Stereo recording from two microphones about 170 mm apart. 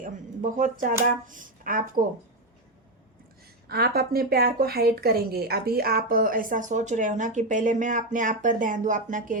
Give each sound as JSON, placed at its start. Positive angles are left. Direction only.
{"t": 0.0, "sound": "speech", "side_deg": -45}
{"t": 3.7, "sound": "speech", "side_deg": -65}